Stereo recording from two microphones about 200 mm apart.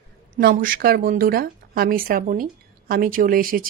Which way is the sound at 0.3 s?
45° right (ahead or behind).